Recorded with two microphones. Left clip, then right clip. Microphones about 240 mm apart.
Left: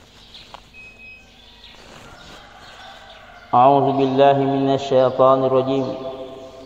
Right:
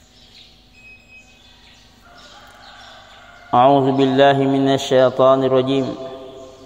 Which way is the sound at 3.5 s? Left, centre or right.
Right.